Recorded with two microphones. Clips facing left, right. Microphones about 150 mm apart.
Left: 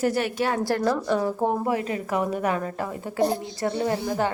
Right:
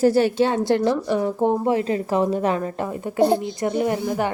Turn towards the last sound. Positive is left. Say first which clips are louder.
# right 3 dB
turn(degrees=-15)  # may be behind; listen again after turning